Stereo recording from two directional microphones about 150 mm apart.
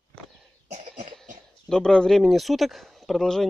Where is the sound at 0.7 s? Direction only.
45° right (ahead or behind).